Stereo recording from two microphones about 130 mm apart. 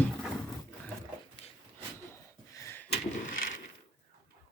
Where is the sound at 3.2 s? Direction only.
90° left.